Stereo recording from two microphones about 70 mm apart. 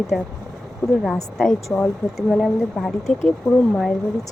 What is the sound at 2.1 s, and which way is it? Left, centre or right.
Speech, centre.